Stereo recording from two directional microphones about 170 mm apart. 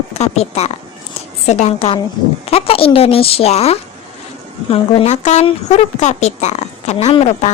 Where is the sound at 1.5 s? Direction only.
40° left (ahead or behind).